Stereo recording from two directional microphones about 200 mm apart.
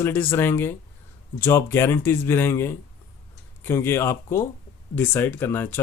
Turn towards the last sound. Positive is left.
turn(degrees=10)  # may be behind; listen again after turning